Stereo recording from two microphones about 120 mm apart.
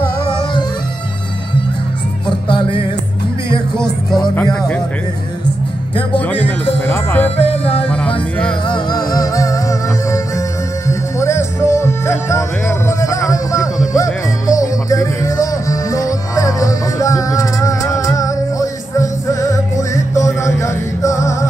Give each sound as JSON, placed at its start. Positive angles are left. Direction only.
{"t": 2.2, "sound": "music", "side_deg": 40}
{"t": 3.7, "sound": "music", "side_deg": 5}
{"t": 6.1, "sound": "music", "side_deg": 15}
{"t": 7.4, "sound": "music", "side_deg": 50}
{"t": 8.6, "sound": "music", "side_deg": 35}